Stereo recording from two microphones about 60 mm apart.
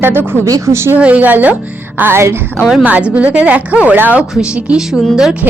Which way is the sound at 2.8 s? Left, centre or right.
Right.